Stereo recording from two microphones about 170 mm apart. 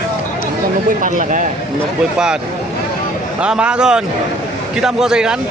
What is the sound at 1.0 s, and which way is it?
Speech, 50° right (ahead or behind).